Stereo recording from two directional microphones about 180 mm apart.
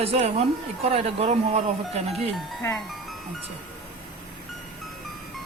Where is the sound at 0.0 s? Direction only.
35° right (ahead or behind).